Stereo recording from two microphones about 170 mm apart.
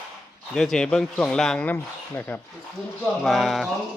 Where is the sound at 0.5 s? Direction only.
5° left (ahead or behind).